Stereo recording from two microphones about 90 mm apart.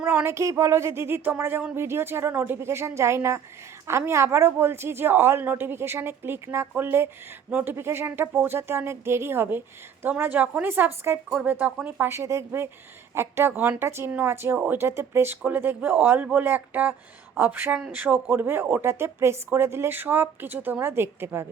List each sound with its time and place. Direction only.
0.0 s speech: 15° right (ahead or behind)
0.3 s speech: 35° right (ahead or behind)
11.3 s speech: 15° right (ahead or behind)
12.0 s speech: 30° right (ahead or behind)